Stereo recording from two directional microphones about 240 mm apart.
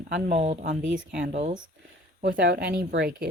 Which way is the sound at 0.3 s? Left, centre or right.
Right.